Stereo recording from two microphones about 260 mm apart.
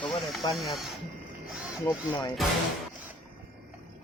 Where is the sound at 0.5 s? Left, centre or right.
Centre.